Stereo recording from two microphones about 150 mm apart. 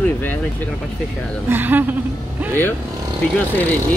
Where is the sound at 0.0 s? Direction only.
10° left (ahead or behind).